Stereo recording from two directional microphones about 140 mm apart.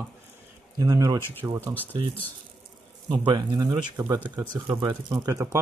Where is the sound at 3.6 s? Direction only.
30° right (ahead or behind).